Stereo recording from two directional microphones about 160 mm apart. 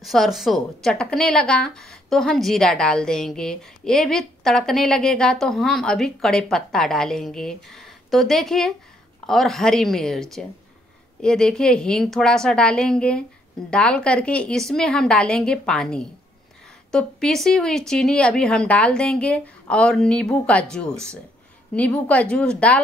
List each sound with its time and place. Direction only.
0.0 s a woman's voice: centre (ahead or behind)